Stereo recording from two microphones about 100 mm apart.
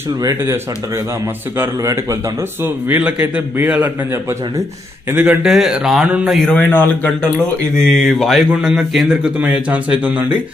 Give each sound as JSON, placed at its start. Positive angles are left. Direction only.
{"t": 0.2, "sound": "speech", "side_deg": -35}
{"t": 1.5, "sound": "speech", "side_deg": -30}
{"t": 2.6, "sound": "a man's voice", "side_deg": -15}
{"t": 5.1, "sound": "a man's voice", "side_deg": -15}
{"t": 5.5, "sound": "speech", "side_deg": -5}
{"t": 6.5, "sound": "speech", "side_deg": 15}
{"t": 7.9, "sound": "a man's voice", "side_deg": 5}